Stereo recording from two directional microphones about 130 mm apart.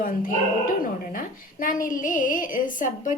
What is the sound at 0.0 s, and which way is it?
A woman's voice, 90° left.